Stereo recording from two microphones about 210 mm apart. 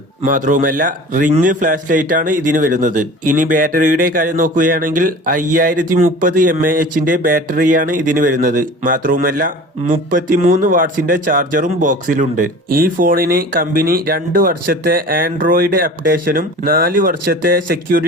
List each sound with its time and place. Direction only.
0.2 s a man's voice: 40° right (ahead or behind)